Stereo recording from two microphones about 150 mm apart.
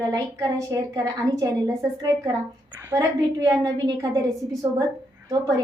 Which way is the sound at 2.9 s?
25° right (ahead or behind).